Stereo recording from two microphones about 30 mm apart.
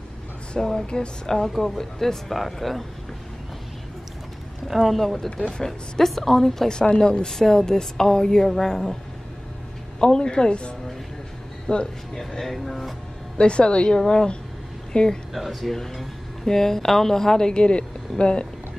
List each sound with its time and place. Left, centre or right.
0.7 s speech: left
1.2 s speech: centre
4.6 s speech: centre
5.5 s speech: centre
7.0 s speech: left
7.2 s speech: centre
9.9 s speech: left
12.1 s speech: centre
13.4 s a woman's voice: left
15.3 s speech: centre
16.4 s speech: centre; by 18.5 s left